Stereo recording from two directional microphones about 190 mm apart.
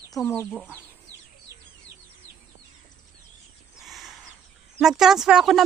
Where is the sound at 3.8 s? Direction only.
Centre (ahead or behind).